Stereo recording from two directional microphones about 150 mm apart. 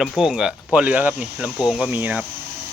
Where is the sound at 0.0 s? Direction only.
5° right (ahead or behind).